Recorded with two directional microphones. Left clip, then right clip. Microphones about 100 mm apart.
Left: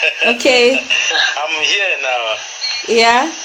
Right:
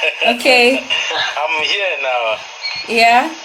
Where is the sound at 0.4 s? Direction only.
90° left.